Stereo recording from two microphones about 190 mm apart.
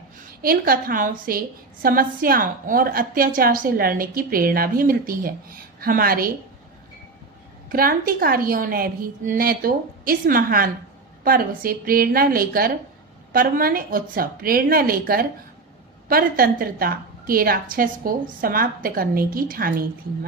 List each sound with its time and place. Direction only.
0.4 s a woman's voice: 50° right (ahead or behind)
7.7 s a woman's voice: 50° right (ahead or behind)